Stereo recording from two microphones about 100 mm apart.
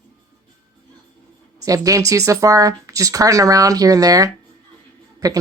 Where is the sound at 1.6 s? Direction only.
35° right (ahead or behind).